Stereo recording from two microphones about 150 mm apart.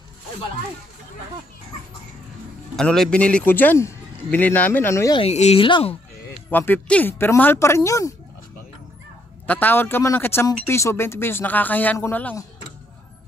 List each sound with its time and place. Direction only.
2.7 s speech: 5° left (ahead or behind)
5.1 s speech: 45° left (ahead or behind)
6.5 s speech: 10° left (ahead or behind)
9.5 s speech: 10° left (ahead or behind)